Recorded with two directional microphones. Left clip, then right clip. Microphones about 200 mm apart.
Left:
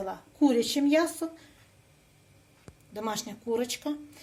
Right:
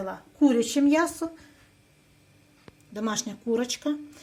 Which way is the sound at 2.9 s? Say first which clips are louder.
Right 3 dB; 30° right (ahead or behind).